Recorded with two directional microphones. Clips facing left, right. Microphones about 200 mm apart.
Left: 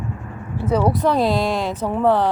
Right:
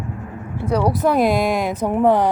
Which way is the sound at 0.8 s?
10° right (ahead or behind).